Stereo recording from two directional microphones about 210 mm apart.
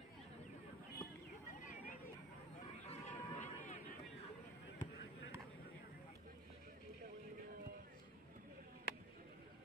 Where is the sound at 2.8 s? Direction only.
30° left (ahead or behind).